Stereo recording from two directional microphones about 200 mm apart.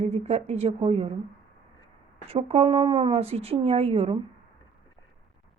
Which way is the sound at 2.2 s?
30° right (ahead or behind).